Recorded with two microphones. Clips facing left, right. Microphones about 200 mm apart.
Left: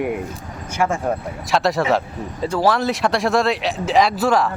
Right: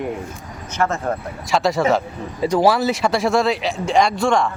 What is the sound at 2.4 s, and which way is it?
Speech, 15° right (ahead or behind).